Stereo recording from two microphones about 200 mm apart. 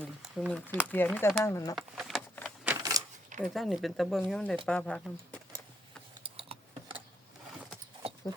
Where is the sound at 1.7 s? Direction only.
Centre (ahead or behind).